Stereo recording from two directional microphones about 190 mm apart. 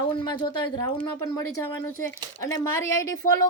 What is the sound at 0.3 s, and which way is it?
Speech, 25° left (ahead or behind).